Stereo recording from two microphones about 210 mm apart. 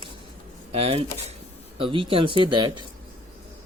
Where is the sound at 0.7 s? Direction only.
30° right (ahead or behind).